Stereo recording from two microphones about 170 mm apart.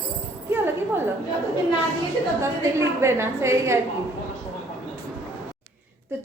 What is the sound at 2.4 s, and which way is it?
A woman's voice, 15° right (ahead or behind).